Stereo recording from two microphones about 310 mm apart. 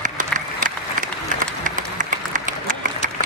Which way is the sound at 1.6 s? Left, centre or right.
Right.